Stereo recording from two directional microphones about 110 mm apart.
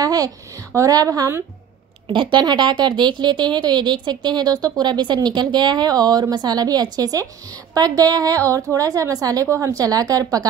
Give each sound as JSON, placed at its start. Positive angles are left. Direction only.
{"t": 0.0, "sound": "a sound", "side_deg": -35}
{"t": 0.7, "sound": "speech", "side_deg": -30}
{"t": 2.0, "sound": "speech", "side_deg": -45}